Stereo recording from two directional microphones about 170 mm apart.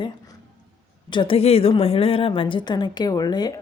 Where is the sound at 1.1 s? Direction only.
30° left (ahead or behind).